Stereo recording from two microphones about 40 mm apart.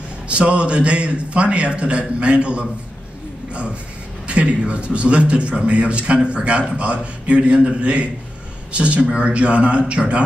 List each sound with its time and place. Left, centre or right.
0.3 s a man's voice: right
4.3 s a man's voice: right